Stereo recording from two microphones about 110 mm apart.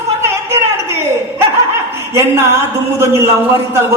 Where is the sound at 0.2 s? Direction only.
25° right (ahead or behind).